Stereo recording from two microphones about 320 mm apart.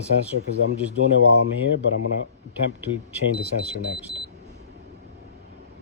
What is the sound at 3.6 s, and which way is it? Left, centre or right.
Speech, centre.